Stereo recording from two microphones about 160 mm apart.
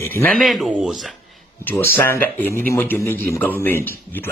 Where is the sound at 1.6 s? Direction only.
10° left (ahead or behind).